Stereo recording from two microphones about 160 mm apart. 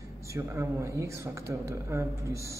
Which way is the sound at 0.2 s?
20° right (ahead or behind).